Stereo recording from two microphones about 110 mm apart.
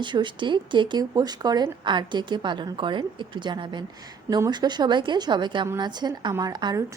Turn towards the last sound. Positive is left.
turn(degrees=-40)  # may be behind; listen again after turning